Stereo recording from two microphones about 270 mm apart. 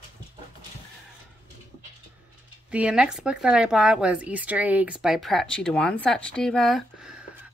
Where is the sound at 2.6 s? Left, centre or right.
Centre.